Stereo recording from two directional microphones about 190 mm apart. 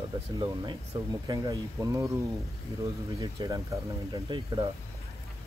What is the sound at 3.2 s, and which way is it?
Speech, 20° right (ahead or behind).